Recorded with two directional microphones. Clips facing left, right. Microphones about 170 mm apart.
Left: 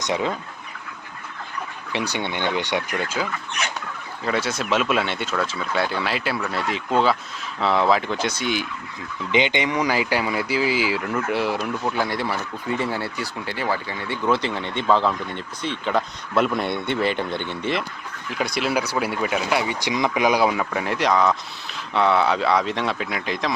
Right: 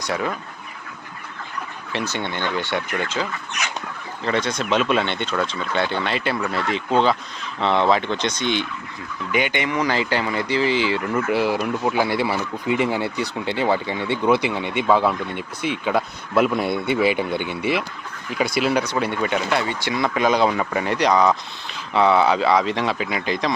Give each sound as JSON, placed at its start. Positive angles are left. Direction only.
{"t": 0.0, "sound": "speech", "side_deg": 20}
{"t": 1.9, "sound": "speech", "side_deg": 15}
{"t": 9.3, "sound": "speech", "side_deg": 20}